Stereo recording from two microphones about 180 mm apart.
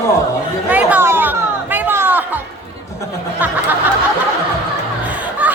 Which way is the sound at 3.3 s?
10° right (ahead or behind).